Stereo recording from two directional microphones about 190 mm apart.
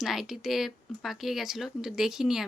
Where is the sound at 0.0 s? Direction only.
Centre (ahead or behind).